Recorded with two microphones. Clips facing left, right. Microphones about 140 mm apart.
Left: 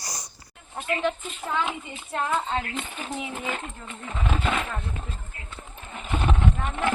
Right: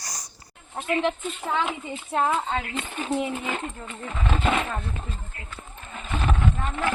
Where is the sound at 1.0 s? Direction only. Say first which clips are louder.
Right 1 dB; 20° right (ahead or behind).